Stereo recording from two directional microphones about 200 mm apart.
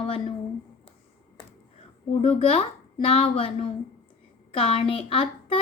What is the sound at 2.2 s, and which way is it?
A woman's voice, 30° left (ahead or behind).